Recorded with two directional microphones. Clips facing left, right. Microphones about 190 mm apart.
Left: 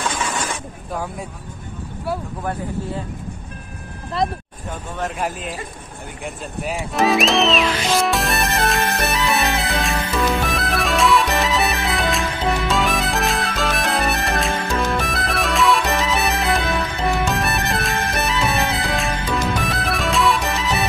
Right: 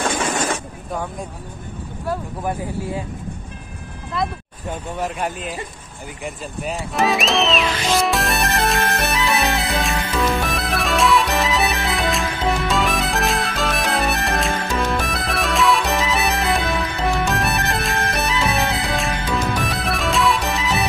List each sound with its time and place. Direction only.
4.1 s speech: 35° left (ahead or behind)
5.0 s speech: centre (ahead or behind)
6.2 s music: centre (ahead or behind)